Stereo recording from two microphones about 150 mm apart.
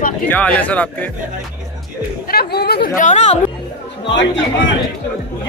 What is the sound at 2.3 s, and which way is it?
Speech, 90° left.